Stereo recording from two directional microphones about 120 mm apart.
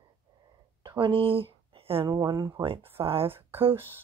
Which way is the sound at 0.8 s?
40° right (ahead or behind).